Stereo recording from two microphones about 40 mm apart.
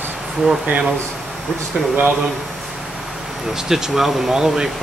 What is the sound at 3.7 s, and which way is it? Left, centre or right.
Speech, centre.